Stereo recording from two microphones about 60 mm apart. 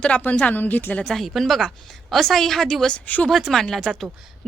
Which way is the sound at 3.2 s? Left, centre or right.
Centre.